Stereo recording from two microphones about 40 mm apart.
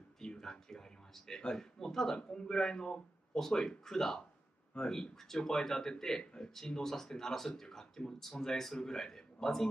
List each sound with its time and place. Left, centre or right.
0.2 s speech: centre